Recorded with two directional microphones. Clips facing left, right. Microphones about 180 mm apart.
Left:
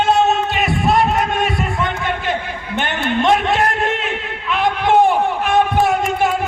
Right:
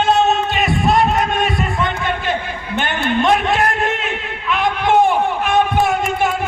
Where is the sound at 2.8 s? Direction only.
25° left (ahead or behind).